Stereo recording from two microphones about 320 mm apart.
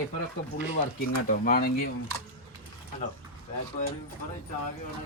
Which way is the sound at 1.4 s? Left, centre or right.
Left.